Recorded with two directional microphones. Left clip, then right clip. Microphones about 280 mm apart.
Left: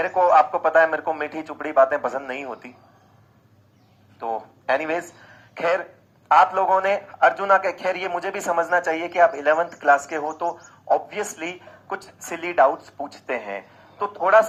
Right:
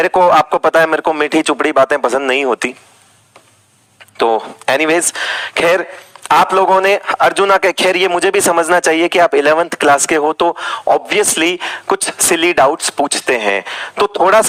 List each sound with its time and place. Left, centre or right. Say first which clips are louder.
0.0 s a man's voice: right 7 dB; right
4.2 s a man's voice: right 15 dB; right